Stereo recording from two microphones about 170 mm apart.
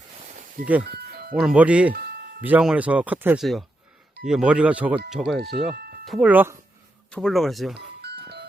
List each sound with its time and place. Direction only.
0.3 s music: 55° right (ahead or behind)
0.9 s music: 65° right (ahead or behind)
1.4 s speech: 5° right (ahead or behind)
1.9 s music: 70° right (ahead or behind)
2.4 s speech: 5° right (ahead or behind)
5.4 s speech: 75° right (ahead or behind)
6.1 s speech: centre (ahead or behind)
6.3 s speech: 10° right (ahead or behind)
7.1 s speech: centre (ahead or behind)
8.0 s music: 75° right (ahead or behind)